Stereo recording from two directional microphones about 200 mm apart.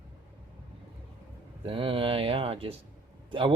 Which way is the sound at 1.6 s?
25° right (ahead or behind).